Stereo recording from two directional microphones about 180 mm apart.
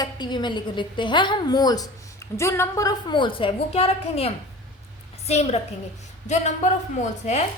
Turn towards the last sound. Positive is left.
turn(degrees=40)  # may be behind; listen again after turning